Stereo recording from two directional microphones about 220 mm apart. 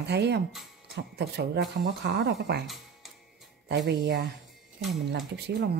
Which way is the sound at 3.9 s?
50° right (ahead or behind).